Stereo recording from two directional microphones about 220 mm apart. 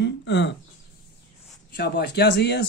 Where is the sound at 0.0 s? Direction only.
55° left (ahead or behind).